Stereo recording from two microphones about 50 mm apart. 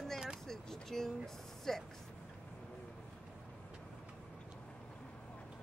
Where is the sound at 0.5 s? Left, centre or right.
Centre.